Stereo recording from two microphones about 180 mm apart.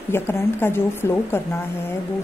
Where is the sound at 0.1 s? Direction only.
10° left (ahead or behind).